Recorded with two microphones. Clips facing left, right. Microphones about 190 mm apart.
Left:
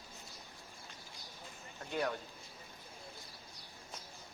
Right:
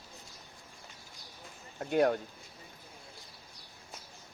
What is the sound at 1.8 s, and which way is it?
Speech, 55° right (ahead or behind).